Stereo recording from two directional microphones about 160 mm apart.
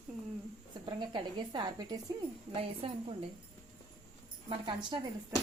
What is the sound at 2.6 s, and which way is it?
Speech, 35° right (ahead or behind).